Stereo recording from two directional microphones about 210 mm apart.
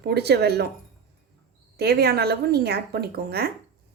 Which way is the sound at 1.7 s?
50° right (ahead or behind).